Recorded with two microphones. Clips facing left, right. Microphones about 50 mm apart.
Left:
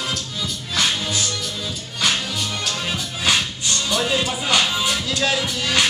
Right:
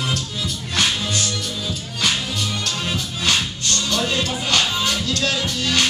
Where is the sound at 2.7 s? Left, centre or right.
Centre.